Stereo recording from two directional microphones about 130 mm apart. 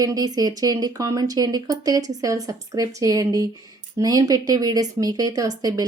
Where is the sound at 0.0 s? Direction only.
30° right (ahead or behind).